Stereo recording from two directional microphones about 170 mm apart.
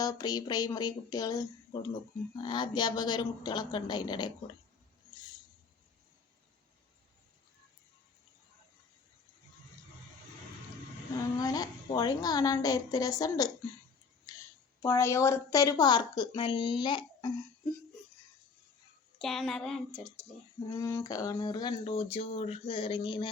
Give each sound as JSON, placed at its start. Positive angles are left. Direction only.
{"t": 0.0, "sound": "speech", "side_deg": 20}
{"t": 11.3, "sound": "speech", "side_deg": 20}
{"t": 14.8, "sound": "speech", "side_deg": 15}
{"t": 19.2, "sound": "speech", "side_deg": 0}
{"t": 20.7, "sound": "speech", "side_deg": 15}